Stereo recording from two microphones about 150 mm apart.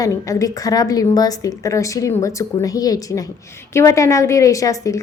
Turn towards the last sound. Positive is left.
turn(degrees=20)  # may be behind; listen again after turning